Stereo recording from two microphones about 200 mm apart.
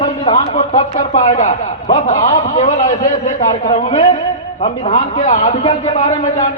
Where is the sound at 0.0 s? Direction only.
30° left (ahead or behind).